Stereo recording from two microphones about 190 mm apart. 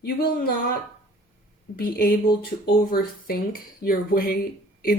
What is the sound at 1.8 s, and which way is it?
Speech, 50° left (ahead or behind).